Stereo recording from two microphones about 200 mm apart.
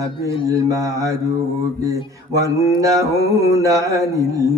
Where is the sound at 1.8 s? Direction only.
15° right (ahead or behind).